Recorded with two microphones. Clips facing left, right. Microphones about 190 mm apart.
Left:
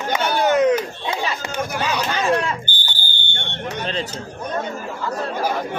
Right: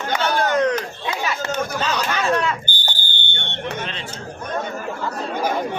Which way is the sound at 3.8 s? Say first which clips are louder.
Left 5 dB; 35° left (ahead or behind).